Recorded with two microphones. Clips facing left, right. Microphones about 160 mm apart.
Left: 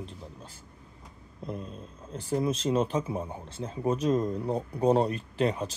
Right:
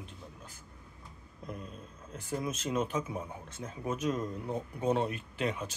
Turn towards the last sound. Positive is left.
turn(degrees=35)  # may be behind; listen again after turning